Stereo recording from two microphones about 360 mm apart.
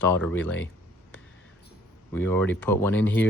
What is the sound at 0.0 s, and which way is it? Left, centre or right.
Speech, centre.